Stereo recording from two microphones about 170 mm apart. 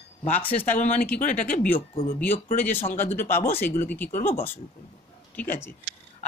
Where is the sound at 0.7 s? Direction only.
50° left (ahead or behind).